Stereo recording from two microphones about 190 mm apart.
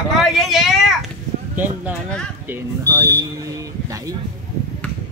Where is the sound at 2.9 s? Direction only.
15° right (ahead or behind).